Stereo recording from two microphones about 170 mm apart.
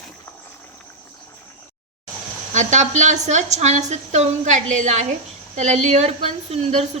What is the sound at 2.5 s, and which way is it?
A woman's voice, 45° right (ahead or behind).